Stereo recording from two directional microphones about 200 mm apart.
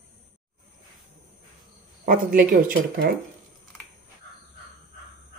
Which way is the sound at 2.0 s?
45° right (ahead or behind).